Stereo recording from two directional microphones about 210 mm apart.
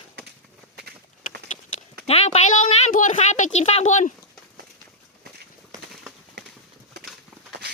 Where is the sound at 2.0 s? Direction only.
30° left (ahead or behind).